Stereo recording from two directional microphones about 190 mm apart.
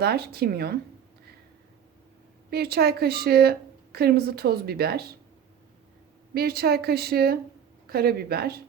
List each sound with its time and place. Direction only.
0.0 s a woman's voice: 55° right (ahead or behind)
2.5 s a woman's voice: 55° right (ahead or behind)
6.3 s a woman's voice: 55° right (ahead or behind)